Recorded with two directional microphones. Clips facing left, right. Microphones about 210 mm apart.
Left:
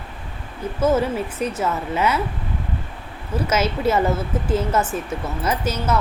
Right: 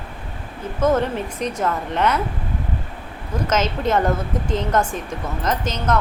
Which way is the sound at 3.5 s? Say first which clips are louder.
Even; 10° left (ahead or behind).